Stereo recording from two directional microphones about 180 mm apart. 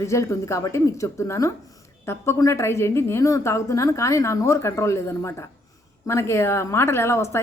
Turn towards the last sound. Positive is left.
turn(degrees=15)  # may be behind; listen again after turning